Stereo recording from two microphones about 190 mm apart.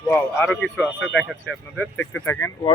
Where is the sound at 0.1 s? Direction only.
10° left (ahead or behind).